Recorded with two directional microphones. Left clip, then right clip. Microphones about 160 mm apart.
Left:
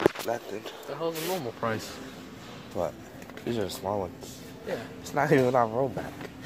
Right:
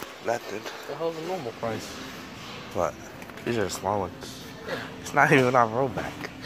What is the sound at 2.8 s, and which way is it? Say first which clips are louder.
Speech: right 4 dB; 10° left (ahead or behind).